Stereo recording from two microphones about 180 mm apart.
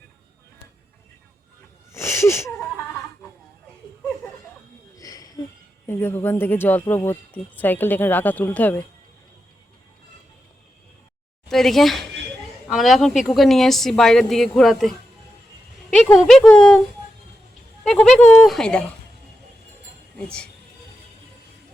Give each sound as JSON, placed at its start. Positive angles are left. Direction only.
{"t": 1.9, "sound": "a sound", "side_deg": 15}
{"t": 4.9, "sound": "a sound", "side_deg": 20}
{"t": 5.9, "sound": "speech", "side_deg": 10}
{"t": 11.4, "sound": "a woman's voice", "side_deg": 0}
{"t": 16.1, "sound": "a woman's voice", "side_deg": 0}
{"t": 17.8, "sound": "a woman's voice", "side_deg": 5}
{"t": 20.1, "sound": "a woman's voice", "side_deg": 5}